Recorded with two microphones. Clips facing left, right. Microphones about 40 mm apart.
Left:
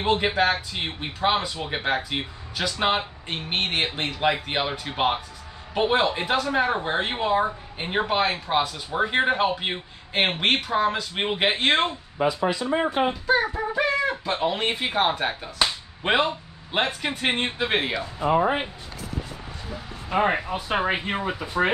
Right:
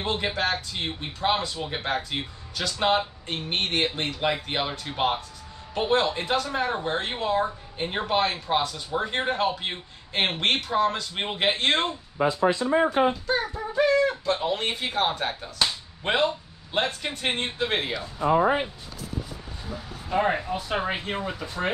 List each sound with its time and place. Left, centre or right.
0.0 s speech: centre
13.3 s speech: centre
18.2 s speech: left
20.1 s speech: left